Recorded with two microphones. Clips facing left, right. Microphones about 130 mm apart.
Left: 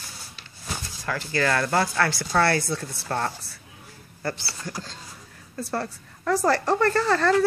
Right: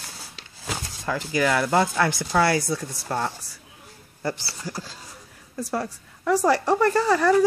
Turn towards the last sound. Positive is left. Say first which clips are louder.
# right 2 dB
turn(degrees=-10)  # may be behind; listen again after turning